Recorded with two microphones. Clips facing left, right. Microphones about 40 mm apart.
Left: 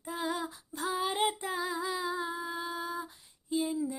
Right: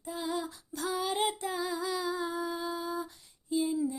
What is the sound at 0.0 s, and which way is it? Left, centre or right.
Female singing, left.